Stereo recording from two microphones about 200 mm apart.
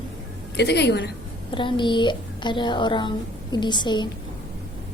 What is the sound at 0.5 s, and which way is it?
Speech, 55° left (ahead or behind).